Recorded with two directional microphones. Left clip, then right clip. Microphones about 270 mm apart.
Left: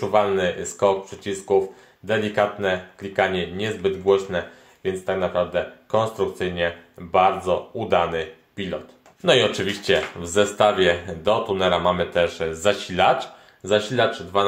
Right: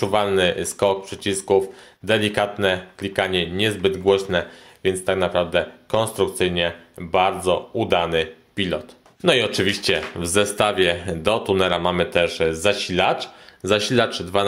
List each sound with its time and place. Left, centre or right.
0.0 s speech: right